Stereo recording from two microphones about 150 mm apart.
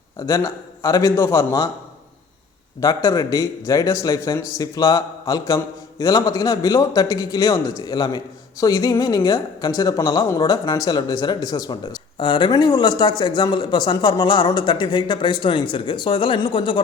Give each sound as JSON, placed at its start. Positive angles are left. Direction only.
{"t": 0.2, "sound": "speech", "side_deg": 20}
{"t": 2.8, "sound": "speech", "side_deg": 20}